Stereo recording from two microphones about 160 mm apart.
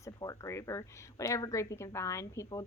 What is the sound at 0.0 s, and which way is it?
A woman's voice, 20° left (ahead or behind).